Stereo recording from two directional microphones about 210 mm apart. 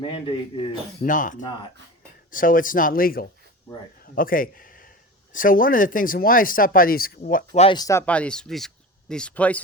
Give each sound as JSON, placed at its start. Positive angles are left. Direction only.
{"t": 0.0, "sound": "a man's voice", "side_deg": 25}
{"t": 1.0, "sound": "speech", "side_deg": 40}
{"t": 7.6, "sound": "speech", "side_deg": 20}